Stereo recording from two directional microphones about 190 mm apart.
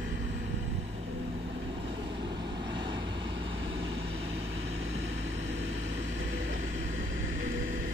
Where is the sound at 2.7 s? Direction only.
25° right (ahead or behind).